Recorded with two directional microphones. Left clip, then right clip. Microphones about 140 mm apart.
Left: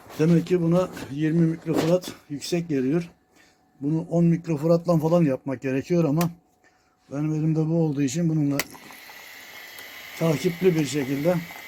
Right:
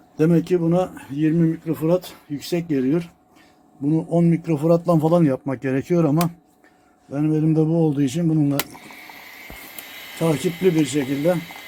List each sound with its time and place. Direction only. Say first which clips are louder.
0.2 s speech: right 4 dB; 20° right (ahead or behind)
3.8 s speech: right 4 dB; 20° right (ahead or behind)
10.2 s speech: right 3 dB; 5° right (ahead or behind)